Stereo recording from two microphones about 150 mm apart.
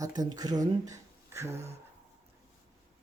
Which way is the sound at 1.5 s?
45° right (ahead or behind).